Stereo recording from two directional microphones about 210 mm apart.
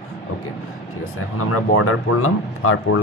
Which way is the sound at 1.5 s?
85° left.